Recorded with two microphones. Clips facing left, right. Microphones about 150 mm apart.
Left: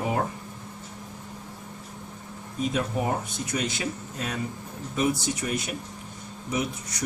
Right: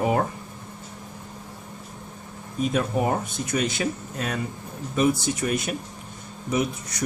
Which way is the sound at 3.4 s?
55° right (ahead or behind).